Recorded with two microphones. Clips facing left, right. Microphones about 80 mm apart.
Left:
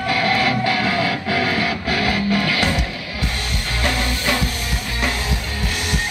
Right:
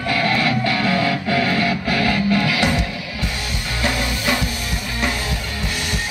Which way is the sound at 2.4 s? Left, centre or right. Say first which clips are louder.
Right 1 dB; centre.